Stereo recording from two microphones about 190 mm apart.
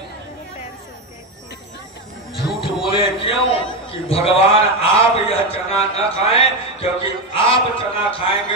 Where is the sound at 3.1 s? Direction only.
30° left (ahead or behind).